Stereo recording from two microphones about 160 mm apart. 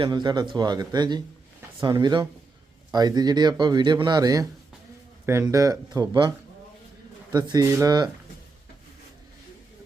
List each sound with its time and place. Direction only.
0.0 s speech: 25° right (ahead or behind)